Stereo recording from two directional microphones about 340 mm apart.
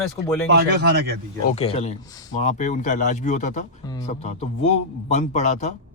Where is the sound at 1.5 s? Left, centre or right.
Centre.